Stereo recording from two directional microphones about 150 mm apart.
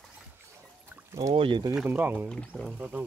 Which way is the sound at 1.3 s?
35° right (ahead or behind).